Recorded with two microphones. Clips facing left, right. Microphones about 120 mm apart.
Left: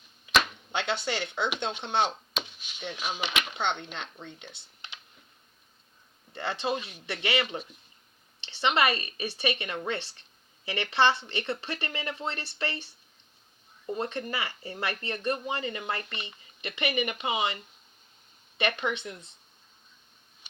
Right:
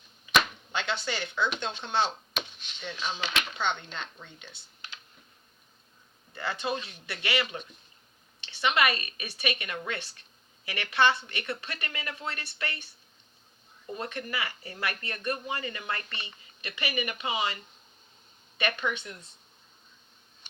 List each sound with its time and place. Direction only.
1.0 s speech: 20° left (ahead or behind)
2.3 s a sound: 10° left (ahead or behind)
3.3 s speech: 20° left (ahead or behind)
6.3 s speech: 25° left (ahead or behind)